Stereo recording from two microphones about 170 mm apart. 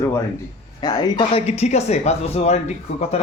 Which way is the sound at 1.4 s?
40° left (ahead or behind).